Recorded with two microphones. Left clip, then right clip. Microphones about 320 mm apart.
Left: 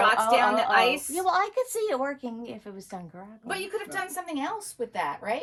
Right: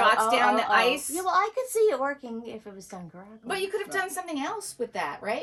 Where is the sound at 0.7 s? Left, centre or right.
Centre.